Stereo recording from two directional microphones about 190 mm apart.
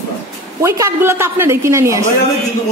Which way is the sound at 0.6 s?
15° right (ahead or behind).